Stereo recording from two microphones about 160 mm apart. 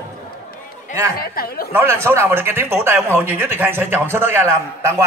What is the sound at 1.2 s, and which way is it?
Speech, 70° left (ahead or behind).